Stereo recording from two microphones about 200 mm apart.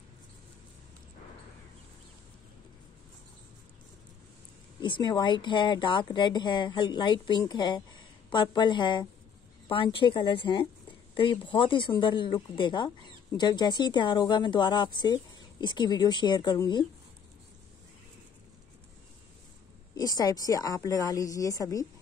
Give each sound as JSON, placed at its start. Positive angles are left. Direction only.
{"t": 4.8, "sound": "speech", "side_deg": 25}
{"t": 20.0, "sound": "a woman's voice", "side_deg": 20}